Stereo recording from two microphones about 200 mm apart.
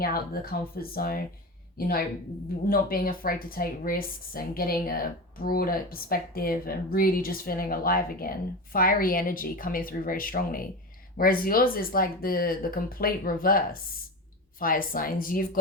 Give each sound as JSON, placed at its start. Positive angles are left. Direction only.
{"t": 0.0, "sound": "speech", "side_deg": 50}
{"t": 2.6, "sound": "speech", "side_deg": 45}